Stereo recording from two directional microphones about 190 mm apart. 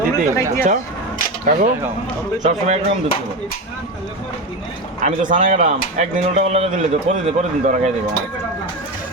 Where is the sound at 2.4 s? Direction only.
35° right (ahead or behind).